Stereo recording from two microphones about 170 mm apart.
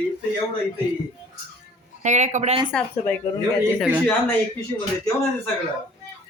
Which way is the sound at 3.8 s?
10° right (ahead or behind).